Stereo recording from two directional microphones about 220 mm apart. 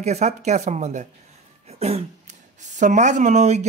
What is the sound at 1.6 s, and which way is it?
Throat clearing, 30° right (ahead or behind).